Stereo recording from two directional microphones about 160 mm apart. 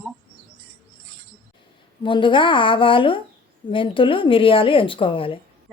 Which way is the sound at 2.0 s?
30° left (ahead or behind).